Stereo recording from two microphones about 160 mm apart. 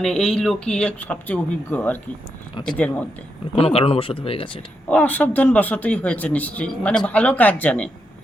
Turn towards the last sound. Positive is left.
turn(degrees=10)  # may be behind; listen again after turning